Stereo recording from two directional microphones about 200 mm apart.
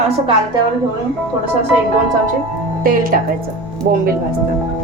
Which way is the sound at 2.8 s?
45° right (ahead or behind).